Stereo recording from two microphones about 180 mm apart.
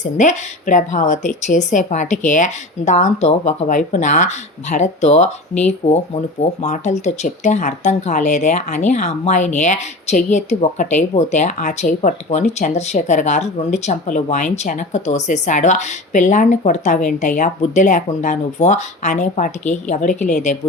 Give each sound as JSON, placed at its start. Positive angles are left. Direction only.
{"t": 0.0, "sound": "speech", "side_deg": 40}